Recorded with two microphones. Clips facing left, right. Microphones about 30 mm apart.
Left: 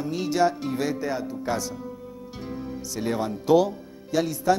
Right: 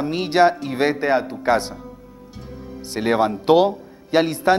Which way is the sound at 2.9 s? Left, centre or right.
Right.